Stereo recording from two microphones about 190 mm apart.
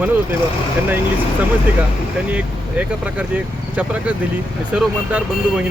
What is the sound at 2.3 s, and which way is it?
Speech, 5° right (ahead or behind).